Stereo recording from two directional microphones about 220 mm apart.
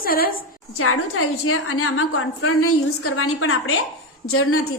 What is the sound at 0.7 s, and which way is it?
A woman's voice, 80° left.